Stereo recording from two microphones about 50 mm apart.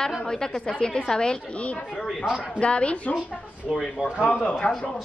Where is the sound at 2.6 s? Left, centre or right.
Left.